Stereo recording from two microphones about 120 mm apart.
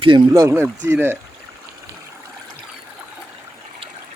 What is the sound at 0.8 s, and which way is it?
Speech, 20° right (ahead or behind).